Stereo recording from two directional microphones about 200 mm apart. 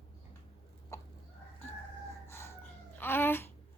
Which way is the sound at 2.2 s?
15° left (ahead or behind).